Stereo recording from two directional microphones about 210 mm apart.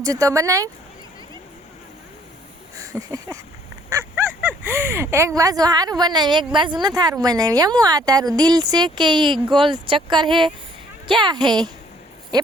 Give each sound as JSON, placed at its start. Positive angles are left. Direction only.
{"t": 0.0, "sound": "speech", "side_deg": -15}
{"t": 2.7, "sound": "a sound", "side_deg": -15}
{"t": 3.8, "sound": "speech", "side_deg": -10}